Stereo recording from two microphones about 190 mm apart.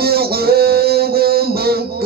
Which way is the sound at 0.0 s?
55° right (ahead or behind).